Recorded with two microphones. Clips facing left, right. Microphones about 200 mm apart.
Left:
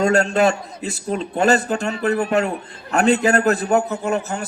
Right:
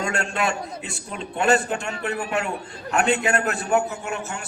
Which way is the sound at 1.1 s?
40° left (ahead or behind).